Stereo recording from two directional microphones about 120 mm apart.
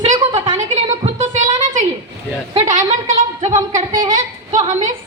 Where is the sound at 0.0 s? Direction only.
80° right.